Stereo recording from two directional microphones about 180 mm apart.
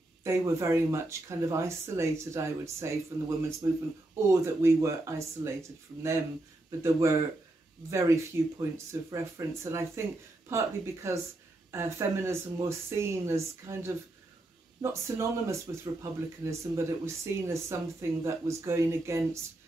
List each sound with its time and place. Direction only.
0.2 s speech: 15° right (ahead or behind)